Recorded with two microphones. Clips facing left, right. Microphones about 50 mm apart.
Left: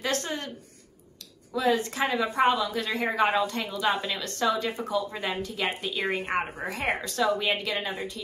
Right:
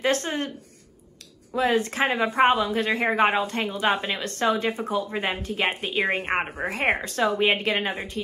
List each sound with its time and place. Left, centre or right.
0.0 s a woman's voice: right
1.5 s a woman's voice: right